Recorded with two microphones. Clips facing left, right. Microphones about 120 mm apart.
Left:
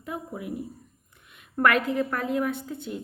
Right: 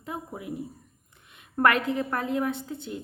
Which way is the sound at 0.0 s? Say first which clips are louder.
Left 2 dB; 25° right (ahead or behind).